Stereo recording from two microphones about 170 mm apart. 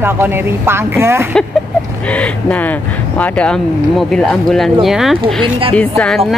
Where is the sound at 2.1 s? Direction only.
10° left (ahead or behind).